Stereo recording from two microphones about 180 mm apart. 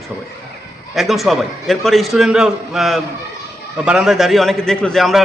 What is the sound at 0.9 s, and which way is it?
A man's voice, centre (ahead or behind).